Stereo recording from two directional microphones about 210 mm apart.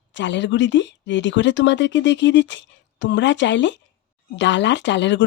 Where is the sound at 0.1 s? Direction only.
60° left (ahead or behind).